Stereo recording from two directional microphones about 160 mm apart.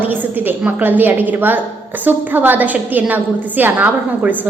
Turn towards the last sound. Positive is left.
turn(degrees=-10)  # may be behind; listen again after turning